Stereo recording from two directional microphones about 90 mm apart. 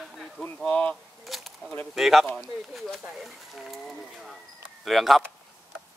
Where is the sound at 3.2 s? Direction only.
Centre (ahead or behind).